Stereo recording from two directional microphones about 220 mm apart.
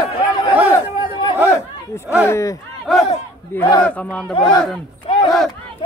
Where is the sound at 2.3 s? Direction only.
15° left (ahead or behind).